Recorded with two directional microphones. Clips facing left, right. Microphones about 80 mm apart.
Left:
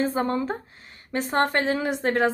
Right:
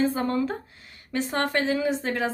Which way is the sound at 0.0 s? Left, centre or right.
Left.